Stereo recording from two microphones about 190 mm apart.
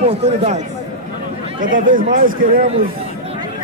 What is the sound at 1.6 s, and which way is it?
Speech, 45° right (ahead or behind).